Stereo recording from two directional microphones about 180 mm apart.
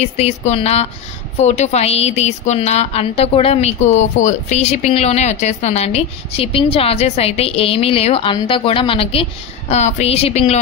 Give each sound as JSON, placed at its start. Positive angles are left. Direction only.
{"t": 0.0, "sound": "a woman's voice", "side_deg": 35}